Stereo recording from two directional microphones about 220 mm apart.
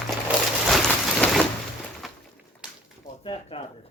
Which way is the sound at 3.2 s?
25° left (ahead or behind).